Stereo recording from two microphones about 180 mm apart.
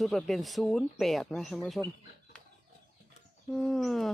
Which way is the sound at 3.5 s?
Centre (ahead or behind).